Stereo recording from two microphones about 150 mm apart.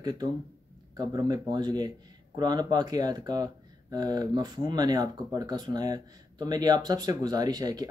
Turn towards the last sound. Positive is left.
turn(degrees=-25)  # may be behind; listen again after turning